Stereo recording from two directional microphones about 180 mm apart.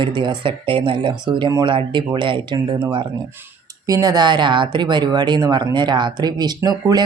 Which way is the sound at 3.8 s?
20° right (ahead or behind).